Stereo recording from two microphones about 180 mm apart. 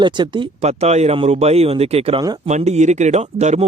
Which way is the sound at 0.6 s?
40° right (ahead or behind).